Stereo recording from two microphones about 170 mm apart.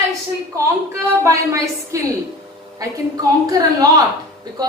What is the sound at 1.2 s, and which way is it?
Speech, 15° right (ahead or behind).